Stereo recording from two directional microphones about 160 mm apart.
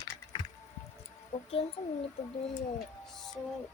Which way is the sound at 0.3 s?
25° left (ahead or behind).